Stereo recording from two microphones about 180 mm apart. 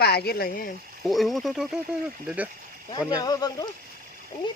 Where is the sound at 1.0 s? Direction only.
Centre (ahead or behind).